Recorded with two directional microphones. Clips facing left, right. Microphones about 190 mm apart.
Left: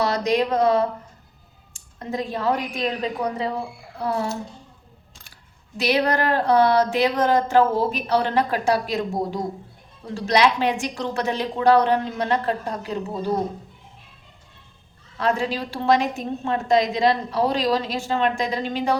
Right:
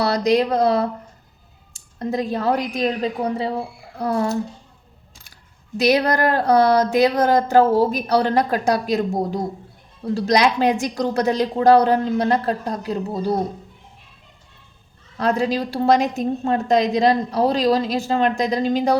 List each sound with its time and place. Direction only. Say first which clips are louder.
0.0 s a woman's voice: right 3 dB; 35° right (ahead or behind)
4.0 s speech: right 4 dB; 45° right (ahead or behind)
5.8 s a woman's voice: right 4 dB; 40° right (ahead or behind)
15.2 s a woman's voice: right 3 dB; 40° right (ahead or behind)